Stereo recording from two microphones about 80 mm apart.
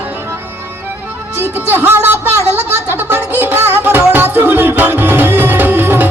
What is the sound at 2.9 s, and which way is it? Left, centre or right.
Music, right.